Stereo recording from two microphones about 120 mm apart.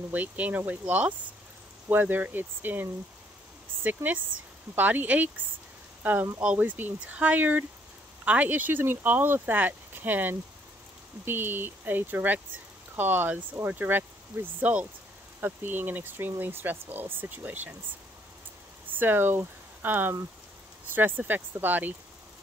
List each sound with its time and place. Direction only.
0.1 s speech: 15° right (ahead or behind)
18.9 s speech: 15° right (ahead or behind)